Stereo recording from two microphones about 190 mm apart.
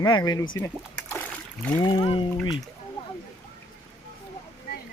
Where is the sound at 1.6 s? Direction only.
10° left (ahead or behind).